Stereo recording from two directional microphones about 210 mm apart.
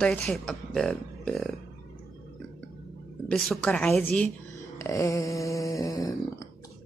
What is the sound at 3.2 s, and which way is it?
Speech, 5° left (ahead or behind).